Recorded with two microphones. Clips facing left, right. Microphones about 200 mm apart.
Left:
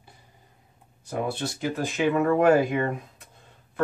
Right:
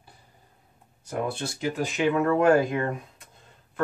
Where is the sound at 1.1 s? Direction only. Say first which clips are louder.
Left 1 dB; centre (ahead or behind).